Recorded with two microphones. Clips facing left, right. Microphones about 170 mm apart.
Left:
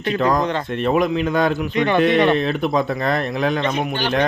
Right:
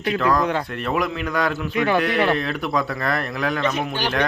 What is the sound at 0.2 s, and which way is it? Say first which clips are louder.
Speech: left 2 dB; 20° left (ahead or behind).